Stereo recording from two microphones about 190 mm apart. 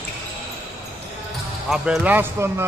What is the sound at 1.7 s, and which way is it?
Speech, 5° right (ahead or behind).